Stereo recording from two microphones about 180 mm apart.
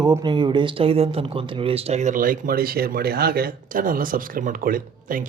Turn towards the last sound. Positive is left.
turn(degrees=-50)  # may be behind; listen again after turning